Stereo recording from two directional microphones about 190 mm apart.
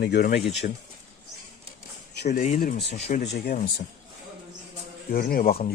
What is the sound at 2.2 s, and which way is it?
Speech, 55° left (ahead or behind).